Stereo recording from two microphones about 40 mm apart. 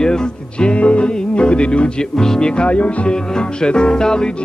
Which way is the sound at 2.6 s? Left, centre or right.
Left.